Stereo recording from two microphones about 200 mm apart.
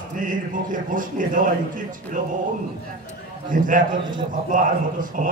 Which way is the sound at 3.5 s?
40° right (ahead or behind).